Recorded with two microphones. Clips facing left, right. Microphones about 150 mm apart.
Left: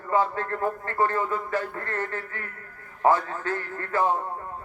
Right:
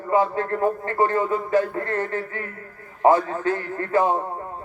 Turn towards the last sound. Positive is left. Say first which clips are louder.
# right 4 dB
turn(degrees=-15)  # may be behind; listen again after turning